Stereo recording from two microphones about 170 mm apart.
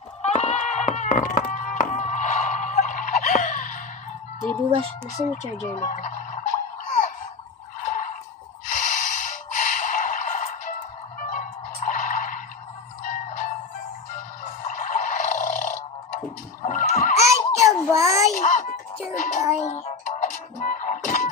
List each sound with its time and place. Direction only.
0.2 s music: 40° left (ahead or behind)
5.8 s music: 50° left (ahead or behind)
7.8 s a sound: 50° left (ahead or behind)
8.6 s snort: 45° left (ahead or behind)
11.2 s music: 50° left (ahead or behind)
16.6 s neigh: 45° left (ahead or behind)
17.6 s a sound: 20° right (ahead or behind)
18.2 s music: 45° left (ahead or behind)